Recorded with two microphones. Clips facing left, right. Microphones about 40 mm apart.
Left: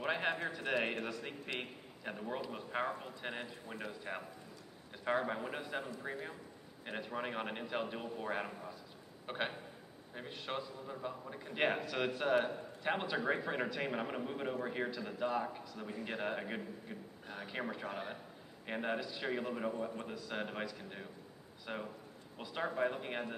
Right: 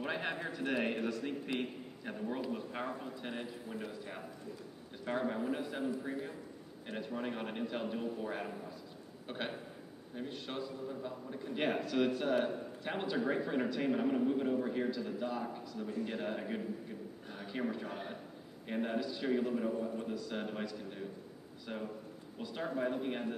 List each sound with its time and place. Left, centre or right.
0.0 s a man's voice: centre
5.0 s a man's voice: centre
18.9 s a man's voice: centre
21.7 s a man's voice: left